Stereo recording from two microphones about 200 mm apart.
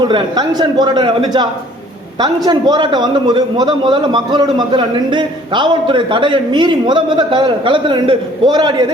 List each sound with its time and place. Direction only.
0.0 s a man's voice: 20° right (ahead or behind)